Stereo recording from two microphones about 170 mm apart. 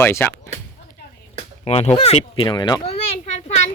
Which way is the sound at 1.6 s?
40° left (ahead or behind).